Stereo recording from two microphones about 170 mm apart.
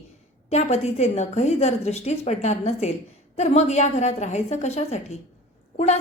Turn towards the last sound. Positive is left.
turn(degrees=40)  # may be behind; listen again after turning